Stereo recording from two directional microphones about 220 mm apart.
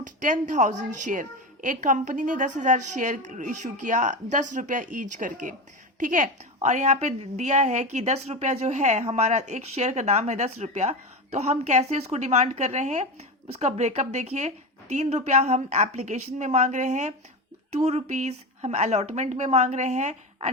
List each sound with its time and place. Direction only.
0.0 s speech: 35° right (ahead or behind)